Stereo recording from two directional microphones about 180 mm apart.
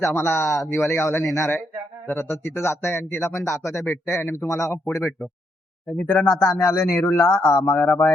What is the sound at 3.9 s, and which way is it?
Speech, 15° left (ahead or behind).